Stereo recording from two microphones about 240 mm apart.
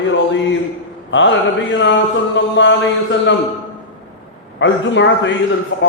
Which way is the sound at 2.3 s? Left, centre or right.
Left.